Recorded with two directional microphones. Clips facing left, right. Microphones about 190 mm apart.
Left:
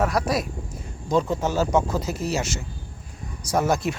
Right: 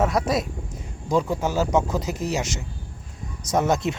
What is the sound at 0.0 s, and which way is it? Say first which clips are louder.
A man's voice: right 1 dB; 20° right (ahead or behind).